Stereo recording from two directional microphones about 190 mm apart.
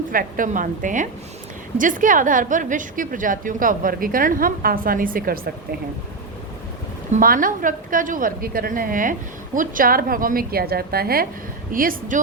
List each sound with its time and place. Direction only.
0.1 s a woman's voice: 45° right (ahead or behind)
7.1 s a woman's voice: 45° right (ahead or behind)